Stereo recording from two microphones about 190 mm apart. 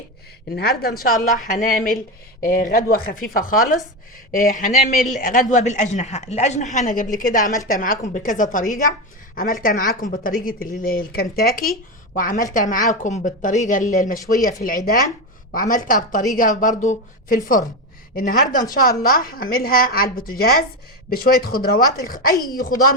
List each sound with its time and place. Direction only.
0.5 s a woman's voice: 55° left (ahead or behind)